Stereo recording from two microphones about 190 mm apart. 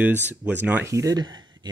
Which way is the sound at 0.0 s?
10° right (ahead or behind).